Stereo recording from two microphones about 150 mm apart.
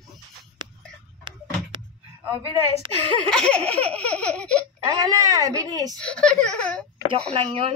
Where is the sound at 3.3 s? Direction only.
5° left (ahead or behind).